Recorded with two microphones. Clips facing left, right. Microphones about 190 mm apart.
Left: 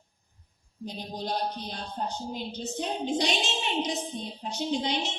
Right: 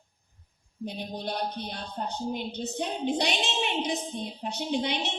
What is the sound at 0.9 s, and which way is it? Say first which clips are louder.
Music: even; 60° right (ahead or behind).